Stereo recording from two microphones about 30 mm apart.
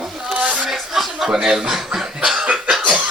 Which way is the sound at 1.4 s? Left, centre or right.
Centre.